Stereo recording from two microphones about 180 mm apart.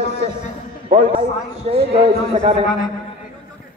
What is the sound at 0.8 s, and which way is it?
A man's voice, 40° right (ahead or behind).